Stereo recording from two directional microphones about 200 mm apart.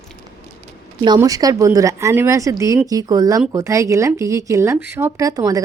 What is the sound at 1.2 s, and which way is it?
A woman's voice, 15° right (ahead or behind).